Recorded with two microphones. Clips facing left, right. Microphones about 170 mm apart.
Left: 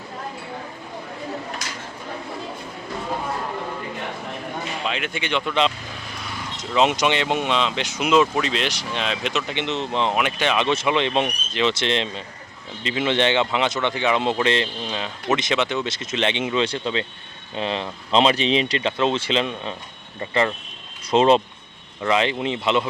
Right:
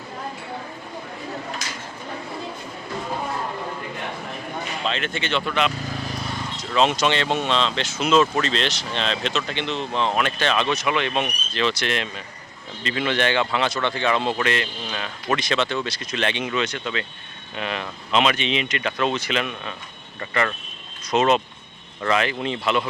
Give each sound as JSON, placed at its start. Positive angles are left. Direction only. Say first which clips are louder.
{"t": 4.9, "sound": "speech", "louder": "right 1 dB", "side_deg": 10}
{"t": 6.7, "sound": "speech", "louder": "left 1 dB", "side_deg": 15}
{"t": 10.7, "sound": "speech", "louder": "left 2 dB", "side_deg": 25}